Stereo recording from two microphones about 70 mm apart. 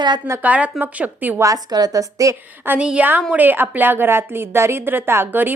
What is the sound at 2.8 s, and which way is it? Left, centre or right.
A woman's voice, centre.